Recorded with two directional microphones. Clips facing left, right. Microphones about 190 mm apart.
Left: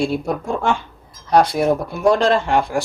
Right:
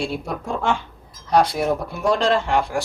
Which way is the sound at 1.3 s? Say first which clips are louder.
Left 3 dB; 50° left (ahead or behind).